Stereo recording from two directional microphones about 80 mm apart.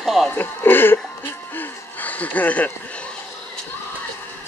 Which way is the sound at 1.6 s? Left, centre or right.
Centre.